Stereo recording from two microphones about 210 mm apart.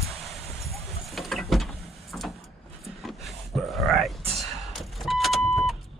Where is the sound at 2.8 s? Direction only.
Centre (ahead or behind).